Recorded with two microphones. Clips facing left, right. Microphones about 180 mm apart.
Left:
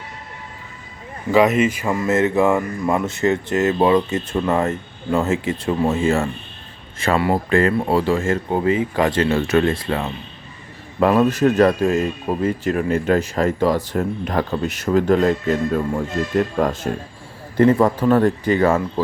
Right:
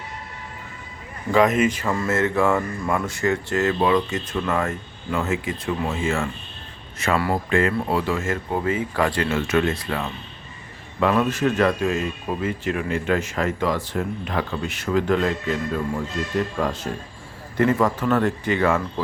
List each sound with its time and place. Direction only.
1.3 s speech: 5° left (ahead or behind); by 6.2 s 40° left (ahead or behind)
7.0 s speech: 25° left (ahead or behind)
9.3 s speech: 35° left (ahead or behind)
17.6 s speech: 30° left (ahead or behind)